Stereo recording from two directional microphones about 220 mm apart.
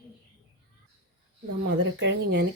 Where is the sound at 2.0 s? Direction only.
50° right (ahead or behind).